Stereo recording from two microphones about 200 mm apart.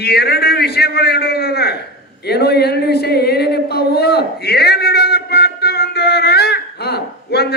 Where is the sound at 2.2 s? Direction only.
55° left (ahead or behind).